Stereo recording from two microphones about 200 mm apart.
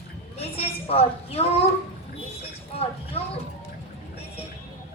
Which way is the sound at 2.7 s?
30° left (ahead or behind).